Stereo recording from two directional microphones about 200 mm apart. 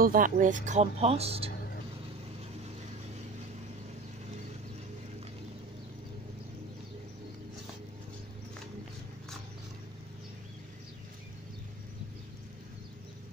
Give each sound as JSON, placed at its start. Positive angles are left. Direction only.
{"t": 0.0, "sound": "speech", "side_deg": -45}